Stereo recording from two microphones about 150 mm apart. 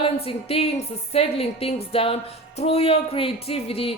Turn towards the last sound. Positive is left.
turn(degrees=40)  # may be behind; listen again after turning